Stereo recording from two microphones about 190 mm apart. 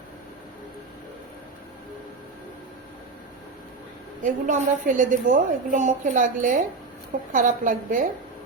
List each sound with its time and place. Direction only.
4.2 s a woman's voice: 40° right (ahead or behind)